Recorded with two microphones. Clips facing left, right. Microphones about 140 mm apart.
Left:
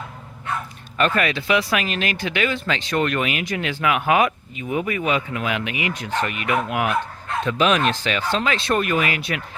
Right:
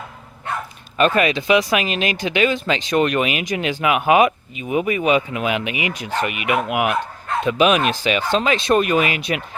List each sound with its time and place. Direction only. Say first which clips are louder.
0.9 s speech: right 4 dB; 20° right (ahead or behind)